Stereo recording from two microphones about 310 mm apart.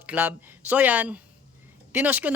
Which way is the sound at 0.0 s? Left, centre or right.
Centre.